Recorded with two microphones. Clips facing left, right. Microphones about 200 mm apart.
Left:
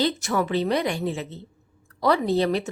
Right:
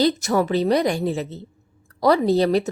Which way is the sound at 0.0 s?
40° right (ahead or behind).